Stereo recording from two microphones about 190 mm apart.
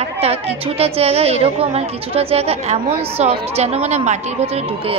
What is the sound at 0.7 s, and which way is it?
A woman's voice, 30° right (ahead or behind).